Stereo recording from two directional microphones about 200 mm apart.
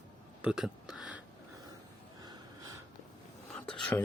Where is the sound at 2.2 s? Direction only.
20° right (ahead or behind).